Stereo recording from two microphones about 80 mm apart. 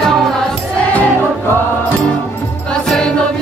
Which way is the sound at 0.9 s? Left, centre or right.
Centre.